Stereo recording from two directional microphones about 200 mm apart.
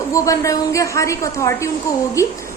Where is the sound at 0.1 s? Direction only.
15° left (ahead or behind).